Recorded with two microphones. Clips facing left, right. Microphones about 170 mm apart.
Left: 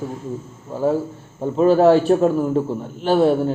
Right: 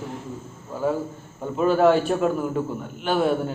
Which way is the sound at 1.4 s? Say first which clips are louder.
Left 5 dB; 30° left (ahead or behind).